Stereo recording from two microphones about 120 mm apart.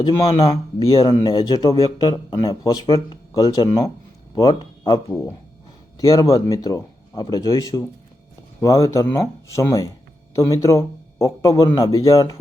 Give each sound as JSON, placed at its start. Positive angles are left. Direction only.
{"t": 0.0, "sound": "speech", "side_deg": 50}
{"t": 1.0, "sound": "a man's voice", "side_deg": 35}